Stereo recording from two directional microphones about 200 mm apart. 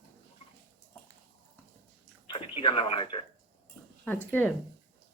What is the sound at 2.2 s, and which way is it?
Speech, 25° left (ahead or behind).